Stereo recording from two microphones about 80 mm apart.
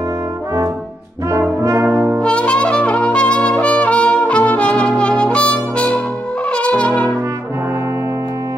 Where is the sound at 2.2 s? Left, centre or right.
Centre.